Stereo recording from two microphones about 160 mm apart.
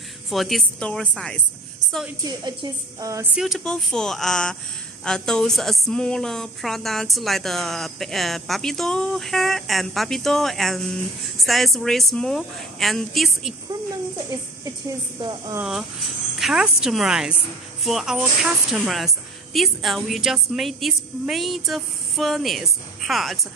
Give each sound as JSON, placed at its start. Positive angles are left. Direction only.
{"t": 0.3, "sound": "a woman's voice", "side_deg": 0}
{"t": 2.2, "sound": "a woman's voice", "side_deg": -25}
{"t": 3.3, "sound": "a woman's voice", "side_deg": 0}
{"t": 15.1, "sound": "a woman's voice", "side_deg": -30}
{"t": 16.3, "sound": "a woman's voice", "side_deg": -5}